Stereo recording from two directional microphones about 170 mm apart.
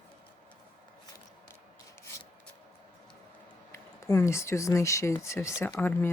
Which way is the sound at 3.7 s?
15° left (ahead or behind).